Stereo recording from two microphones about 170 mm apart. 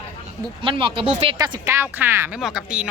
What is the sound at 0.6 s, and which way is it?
Speech, 30° right (ahead or behind).